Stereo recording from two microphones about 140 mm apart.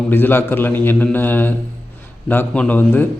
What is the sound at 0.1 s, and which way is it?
A man's voice, 15° left (ahead or behind).